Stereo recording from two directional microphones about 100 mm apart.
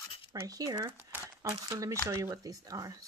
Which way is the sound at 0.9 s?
20° right (ahead or behind).